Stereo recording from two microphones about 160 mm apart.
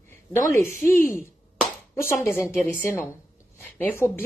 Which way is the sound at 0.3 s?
15° left (ahead or behind).